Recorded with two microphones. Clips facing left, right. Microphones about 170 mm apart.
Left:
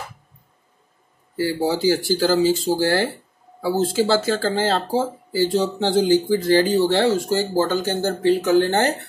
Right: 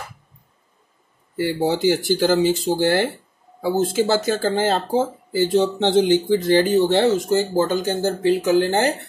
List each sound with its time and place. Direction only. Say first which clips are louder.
1.7 s speech: right 1 dB; 20° right (ahead or behind)